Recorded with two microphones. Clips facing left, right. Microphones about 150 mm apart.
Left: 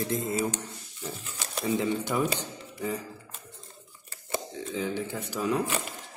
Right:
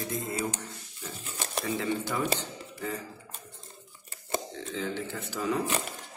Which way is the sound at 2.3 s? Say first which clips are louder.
Left 1 dB; 15° left (ahead or behind).